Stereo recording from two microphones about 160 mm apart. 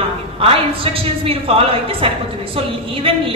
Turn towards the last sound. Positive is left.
turn(degrees=-35)  # may be behind; listen again after turning